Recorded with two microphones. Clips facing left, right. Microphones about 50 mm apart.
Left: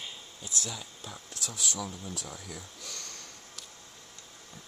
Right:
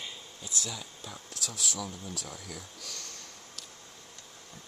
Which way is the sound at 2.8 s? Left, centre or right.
Left.